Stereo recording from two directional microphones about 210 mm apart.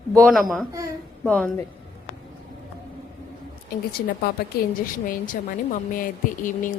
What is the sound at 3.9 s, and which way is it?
Speech, 45° left (ahead or behind).